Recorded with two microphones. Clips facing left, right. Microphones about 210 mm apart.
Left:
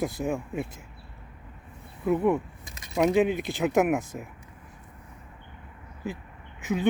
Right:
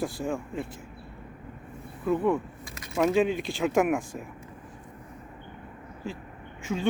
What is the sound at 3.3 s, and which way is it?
Speech, 15° left (ahead or behind).